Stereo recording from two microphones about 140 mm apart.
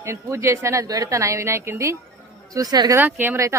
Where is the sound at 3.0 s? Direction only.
15° right (ahead or behind).